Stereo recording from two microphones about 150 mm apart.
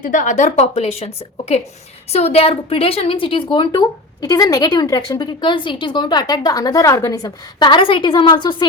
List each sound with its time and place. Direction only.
0.0 s a woman's voice: 60° left (ahead or behind); by 8.6 s 30° left (ahead or behind)